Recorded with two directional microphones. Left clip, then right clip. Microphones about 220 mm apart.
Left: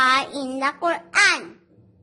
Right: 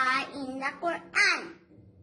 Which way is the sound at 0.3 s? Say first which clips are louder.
Left 9 dB; 50° left (ahead or behind).